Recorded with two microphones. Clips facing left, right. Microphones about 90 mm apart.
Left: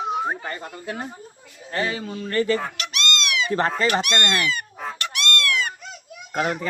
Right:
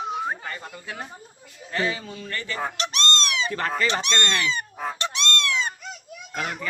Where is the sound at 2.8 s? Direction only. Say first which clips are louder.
Right 1 dB; 35° right (ahead or behind).